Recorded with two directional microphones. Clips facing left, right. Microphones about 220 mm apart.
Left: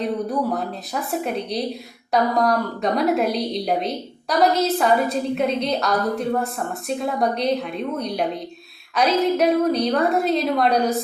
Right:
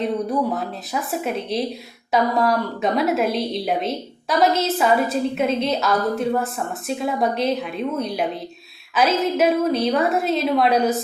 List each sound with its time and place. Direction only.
0.5 s a woman's voice: centre (ahead or behind)